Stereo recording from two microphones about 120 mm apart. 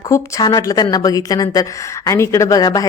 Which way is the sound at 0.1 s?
30° left (ahead or behind).